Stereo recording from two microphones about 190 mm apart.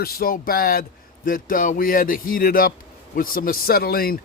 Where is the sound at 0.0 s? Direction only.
50° left (ahead or behind).